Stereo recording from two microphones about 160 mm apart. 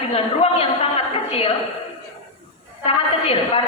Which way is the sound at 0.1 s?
35° left (ahead or behind).